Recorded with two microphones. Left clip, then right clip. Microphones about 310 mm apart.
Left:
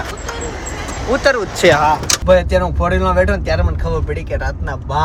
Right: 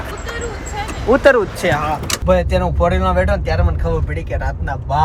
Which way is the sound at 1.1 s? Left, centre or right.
Centre.